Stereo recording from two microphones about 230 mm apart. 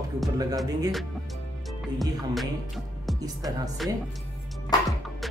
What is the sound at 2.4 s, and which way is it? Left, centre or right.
Music, centre.